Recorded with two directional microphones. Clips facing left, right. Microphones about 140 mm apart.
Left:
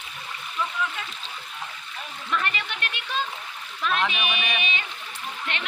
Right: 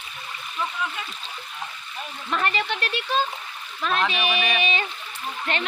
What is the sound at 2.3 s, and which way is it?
Speech, 35° right (ahead or behind).